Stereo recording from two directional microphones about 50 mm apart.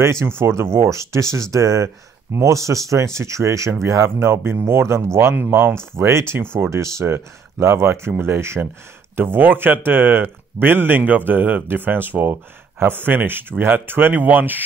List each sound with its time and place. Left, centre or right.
0.0 s speech: right
3.8 s speech: right
5.9 s speech: right
6.3 s speech: right
6.7 s speech: right
7.5 s speech: right
9.1 s speech: right